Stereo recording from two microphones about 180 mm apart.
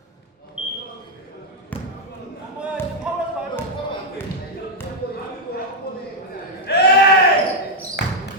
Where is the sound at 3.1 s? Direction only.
5° right (ahead or behind).